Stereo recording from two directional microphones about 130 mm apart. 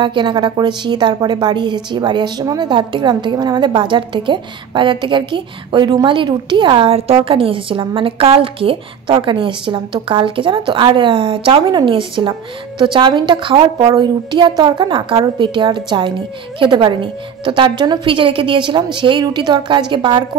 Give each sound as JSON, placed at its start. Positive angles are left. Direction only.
{"t": 0.0, "sound": "a woman's voice", "side_deg": -35}